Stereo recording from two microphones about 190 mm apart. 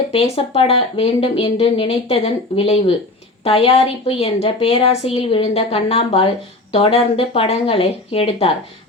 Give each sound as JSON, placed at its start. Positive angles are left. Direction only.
{"t": 0.1, "sound": "a woman's voice", "side_deg": 30}